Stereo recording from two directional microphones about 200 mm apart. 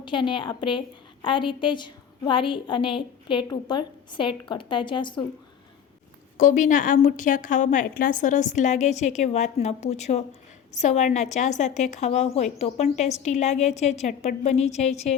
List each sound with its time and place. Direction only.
0.0 s a woman's voice: 25° left (ahead or behind)
6.3 s speech: 40° left (ahead or behind)